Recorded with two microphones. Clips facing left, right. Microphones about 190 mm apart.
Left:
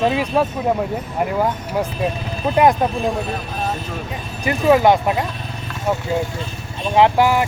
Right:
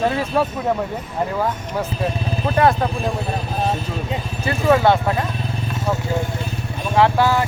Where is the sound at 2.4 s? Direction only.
15° left (ahead or behind).